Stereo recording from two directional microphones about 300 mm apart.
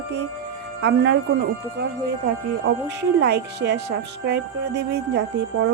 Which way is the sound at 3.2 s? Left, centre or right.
Right.